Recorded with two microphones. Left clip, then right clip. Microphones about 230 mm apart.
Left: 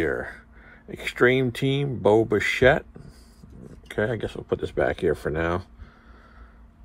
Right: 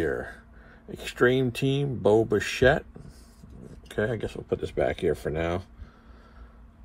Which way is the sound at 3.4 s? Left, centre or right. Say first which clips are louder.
Left 4 dB; centre.